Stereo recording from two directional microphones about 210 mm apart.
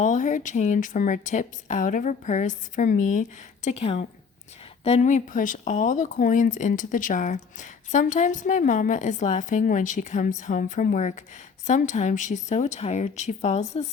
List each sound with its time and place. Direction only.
0.0 s speech: 35° left (ahead or behind)